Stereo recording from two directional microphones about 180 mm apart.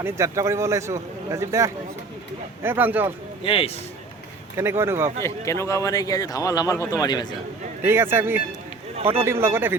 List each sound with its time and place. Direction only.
0.0 s a man's voice: 15° right (ahead or behind)
3.4 s speech: 30° left (ahead or behind)
4.5 s a man's voice: 15° right (ahead or behind)
5.2 s speech: 15° left (ahead or behind)
7.8 s a man's voice: 15° right (ahead or behind)